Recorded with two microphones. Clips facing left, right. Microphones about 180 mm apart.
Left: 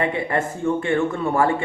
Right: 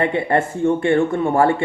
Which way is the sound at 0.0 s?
30° right (ahead or behind).